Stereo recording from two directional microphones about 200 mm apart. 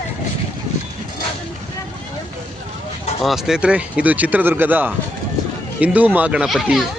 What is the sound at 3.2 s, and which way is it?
Speech, centre (ahead or behind).